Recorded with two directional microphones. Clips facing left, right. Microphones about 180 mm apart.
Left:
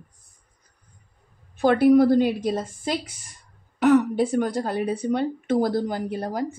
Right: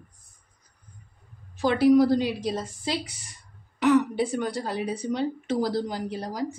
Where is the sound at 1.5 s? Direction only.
55° left (ahead or behind).